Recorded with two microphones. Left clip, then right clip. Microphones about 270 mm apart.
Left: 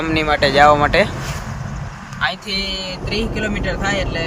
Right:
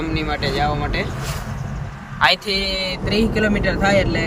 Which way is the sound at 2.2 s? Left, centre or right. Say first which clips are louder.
Right 5 dB; right.